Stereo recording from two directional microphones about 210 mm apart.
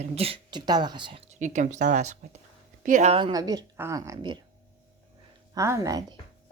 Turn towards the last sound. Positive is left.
turn(degrees=-15)  # may be behind; listen again after turning